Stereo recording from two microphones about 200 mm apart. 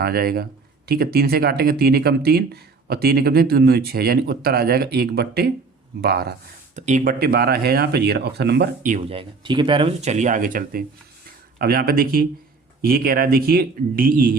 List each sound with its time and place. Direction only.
0.0 s speech: 50° right (ahead or behind)
6.7 s speech: 35° right (ahead or behind)
9.0 s speech: 25° right (ahead or behind); by 14.3 s 45° right (ahead or behind)